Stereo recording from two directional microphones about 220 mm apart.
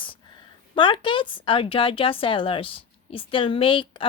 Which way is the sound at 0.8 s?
20° left (ahead or behind).